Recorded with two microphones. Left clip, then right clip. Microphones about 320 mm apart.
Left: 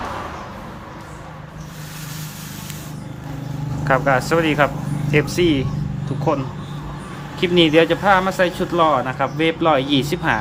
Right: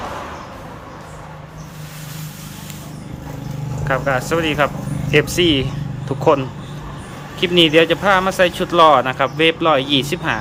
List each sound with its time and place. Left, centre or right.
3.8 s speech: centre
7.3 s speech: centre